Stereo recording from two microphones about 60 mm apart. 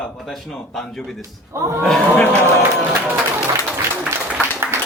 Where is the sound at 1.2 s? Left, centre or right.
Right.